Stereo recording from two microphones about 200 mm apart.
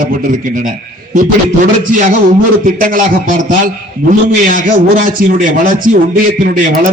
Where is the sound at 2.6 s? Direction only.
45° right (ahead or behind).